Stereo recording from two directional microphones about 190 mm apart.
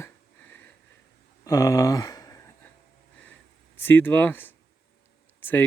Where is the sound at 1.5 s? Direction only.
15° left (ahead or behind).